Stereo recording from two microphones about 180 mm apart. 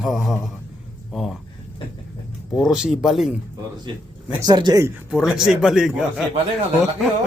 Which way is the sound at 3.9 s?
25° right (ahead or behind).